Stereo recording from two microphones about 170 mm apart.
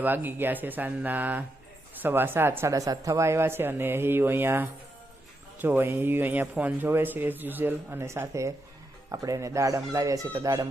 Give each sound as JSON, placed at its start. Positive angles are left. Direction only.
{"t": 0.0, "sound": "speech", "side_deg": -10}